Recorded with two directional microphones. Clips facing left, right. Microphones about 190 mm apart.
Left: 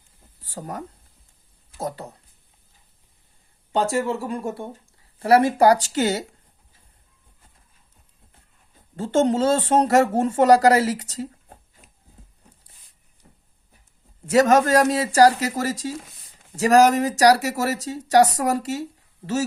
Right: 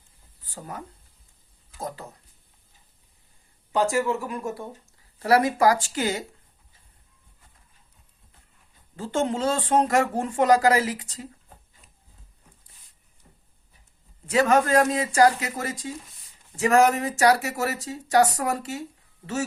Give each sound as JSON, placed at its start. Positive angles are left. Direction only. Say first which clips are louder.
{"t": 0.6, "sound": "speech", "louder": "left 5 dB", "side_deg": 45}
{"t": 2.0, "sound": "speech", "louder": "left 4 dB", "side_deg": 35}
{"t": 3.7, "sound": "speech", "louder": "left 1 dB", "side_deg": 30}
{"t": 9.0, "sound": "speech", "louder": "left 6 dB", "side_deg": 40}
{"t": 14.3, "sound": "speech", "louder": "left 3 dB", "side_deg": 40}